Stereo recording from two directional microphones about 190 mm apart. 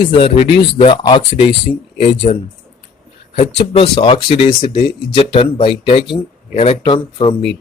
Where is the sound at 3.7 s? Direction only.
30° left (ahead or behind).